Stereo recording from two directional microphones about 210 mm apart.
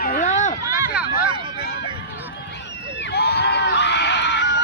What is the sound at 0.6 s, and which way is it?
Run, 15° right (ahead or behind).